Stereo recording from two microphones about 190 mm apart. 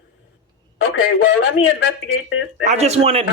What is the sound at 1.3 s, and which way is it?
Speech, 65° left (ahead or behind).